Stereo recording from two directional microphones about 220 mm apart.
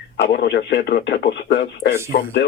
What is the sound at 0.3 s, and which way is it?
A man's voice, 50° left (ahead or behind).